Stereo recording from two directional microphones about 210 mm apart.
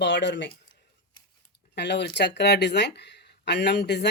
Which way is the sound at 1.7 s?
55° left (ahead or behind).